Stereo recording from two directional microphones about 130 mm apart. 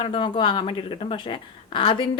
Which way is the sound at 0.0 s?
40° left (ahead or behind).